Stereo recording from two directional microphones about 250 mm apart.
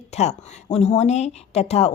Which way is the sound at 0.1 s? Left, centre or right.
Left.